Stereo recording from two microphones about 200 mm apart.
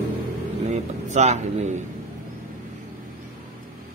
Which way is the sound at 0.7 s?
35° right (ahead or behind).